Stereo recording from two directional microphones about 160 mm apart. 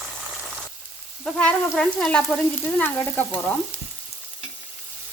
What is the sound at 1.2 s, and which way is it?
Frying, 5° left (ahead or behind).